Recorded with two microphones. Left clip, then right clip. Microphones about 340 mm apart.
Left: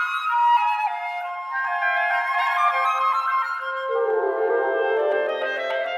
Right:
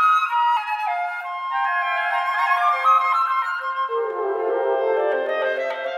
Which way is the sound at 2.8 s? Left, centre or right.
Right.